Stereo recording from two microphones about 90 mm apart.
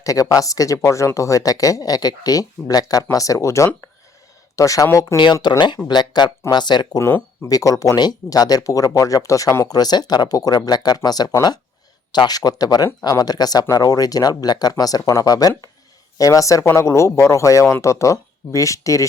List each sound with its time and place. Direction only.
0.0 s speech: 40° left (ahead or behind)
5.1 s speech: 55° left (ahead or behind)
7.4 s speech: 40° left (ahead or behind)